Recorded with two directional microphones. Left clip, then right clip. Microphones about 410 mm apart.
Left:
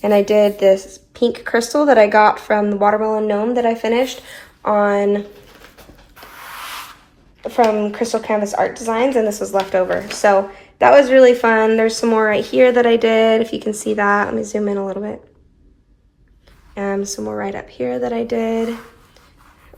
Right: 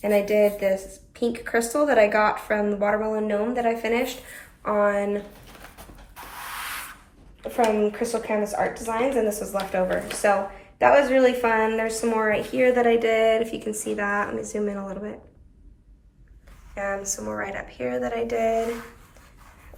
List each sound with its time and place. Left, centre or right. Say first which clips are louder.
0.0 s speech: left 7 dB; centre
7.5 s a woman's voice: left 6 dB; centre
16.7 s speech: left 6 dB; centre